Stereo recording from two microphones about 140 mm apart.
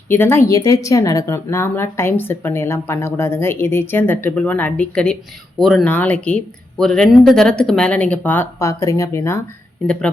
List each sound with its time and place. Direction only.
0.1 s speech: 15° left (ahead or behind)
9.8 s speech: 5° left (ahead or behind)